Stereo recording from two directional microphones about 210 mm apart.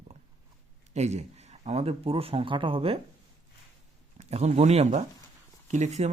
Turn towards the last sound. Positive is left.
turn(degrees=-35)  # may be behind; listen again after turning